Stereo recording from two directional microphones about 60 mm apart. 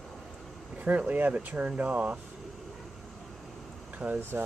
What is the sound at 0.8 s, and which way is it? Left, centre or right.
Speech, right.